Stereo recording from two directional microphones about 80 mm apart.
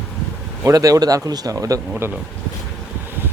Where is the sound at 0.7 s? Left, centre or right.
Right.